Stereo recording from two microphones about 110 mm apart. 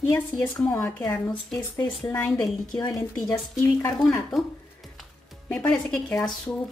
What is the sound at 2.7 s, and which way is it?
Speech, 35° left (ahead or behind).